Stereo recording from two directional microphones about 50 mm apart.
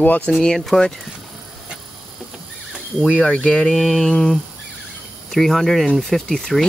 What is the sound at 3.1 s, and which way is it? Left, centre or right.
Speech, left.